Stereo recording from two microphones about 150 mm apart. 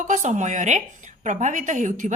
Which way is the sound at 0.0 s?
55° right (ahead or behind).